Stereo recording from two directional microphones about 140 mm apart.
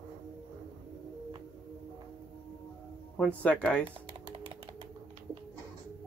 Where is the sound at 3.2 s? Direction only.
10° left (ahead or behind).